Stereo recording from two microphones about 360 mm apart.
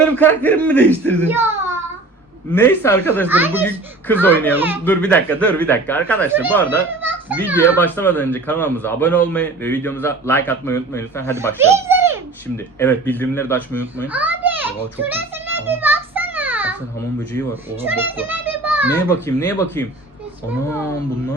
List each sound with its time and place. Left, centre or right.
0.2 s a man's voice: centre
1.3 s a sound: centre
2.5 s a man's voice: centre
3.2 s a man's voice: centre
4.5 s a man's voice: centre
6.2 s a man's voice: centre
7.0 s children playing: centre
7.8 s a man's voice: centre
11.3 s a child's voice: centre
12.8 s a child's voice: centre
19.0 s speech: centre